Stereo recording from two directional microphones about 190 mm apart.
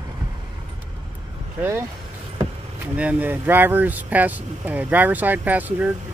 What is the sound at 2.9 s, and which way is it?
Speech, 10° right (ahead or behind).